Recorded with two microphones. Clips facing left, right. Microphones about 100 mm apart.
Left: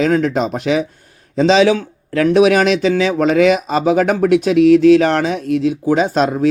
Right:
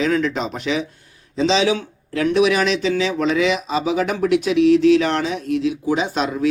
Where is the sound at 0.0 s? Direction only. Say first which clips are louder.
Left 5 dB; 45° left (ahead or behind).